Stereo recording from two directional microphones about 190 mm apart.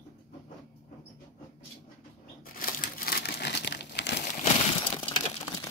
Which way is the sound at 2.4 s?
50° left (ahead or behind).